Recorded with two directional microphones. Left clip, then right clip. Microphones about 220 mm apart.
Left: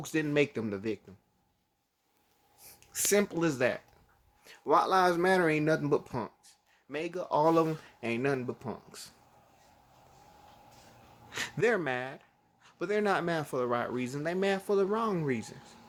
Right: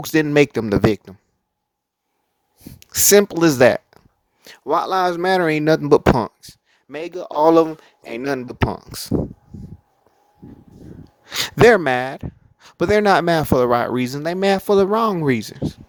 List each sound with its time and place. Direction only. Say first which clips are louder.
0.0 s speech: right 14 dB; 45° right (ahead or behind)
2.6 s speech: right 14 dB; 40° right (ahead or behind)
11.3 s speech: right 17 dB; 50° right (ahead or behind)